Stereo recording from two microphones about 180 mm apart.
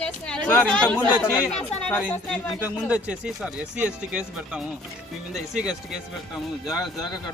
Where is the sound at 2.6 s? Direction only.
5° right (ahead or behind).